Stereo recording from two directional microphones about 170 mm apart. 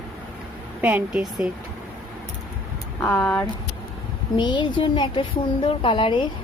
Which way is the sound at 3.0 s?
10° left (ahead or behind).